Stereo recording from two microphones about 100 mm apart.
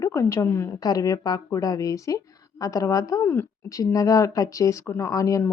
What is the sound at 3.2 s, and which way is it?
Speech, 20° left (ahead or behind).